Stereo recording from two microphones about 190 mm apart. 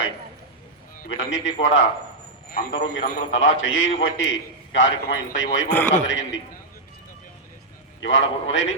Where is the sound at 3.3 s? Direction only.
90° left.